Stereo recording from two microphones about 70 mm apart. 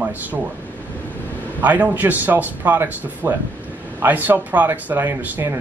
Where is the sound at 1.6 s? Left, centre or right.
Right.